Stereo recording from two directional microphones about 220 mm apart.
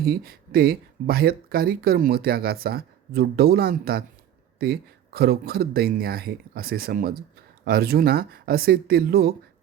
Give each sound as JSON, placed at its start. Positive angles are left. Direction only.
{"t": 0.0, "sound": "speech", "side_deg": -45}